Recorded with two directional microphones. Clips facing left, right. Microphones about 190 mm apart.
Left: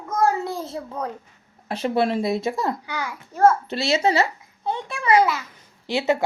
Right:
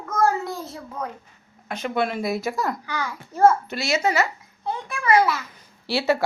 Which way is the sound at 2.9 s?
15° left (ahead or behind).